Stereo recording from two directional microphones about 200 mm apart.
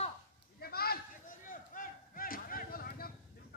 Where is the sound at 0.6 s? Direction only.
50° left (ahead or behind).